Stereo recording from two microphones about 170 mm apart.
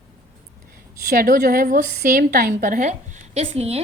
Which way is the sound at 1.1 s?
60° right (ahead or behind).